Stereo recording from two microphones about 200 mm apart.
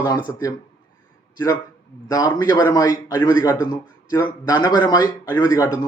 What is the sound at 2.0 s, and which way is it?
A man's voice, 20° left (ahead or behind).